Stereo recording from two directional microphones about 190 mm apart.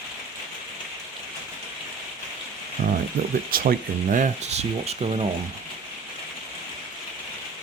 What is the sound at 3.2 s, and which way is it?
Speech, 50° right (ahead or behind).